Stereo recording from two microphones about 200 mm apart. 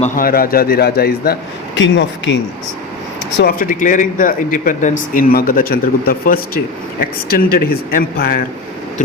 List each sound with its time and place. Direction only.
0.0 s speech: 45° left (ahead or behind)
1.7 s speech: 65° left (ahead or behind)
3.3 s speech: 45° left (ahead or behind)